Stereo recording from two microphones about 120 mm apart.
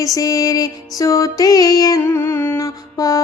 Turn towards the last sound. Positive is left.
turn(degrees=30)  # may be behind; listen again after turning